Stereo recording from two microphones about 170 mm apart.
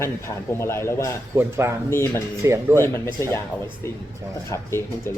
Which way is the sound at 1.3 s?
15° right (ahead or behind).